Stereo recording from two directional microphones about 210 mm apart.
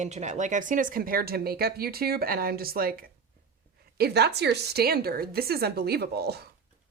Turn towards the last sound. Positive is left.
turn(degrees=-50)  # may be behind; listen again after turning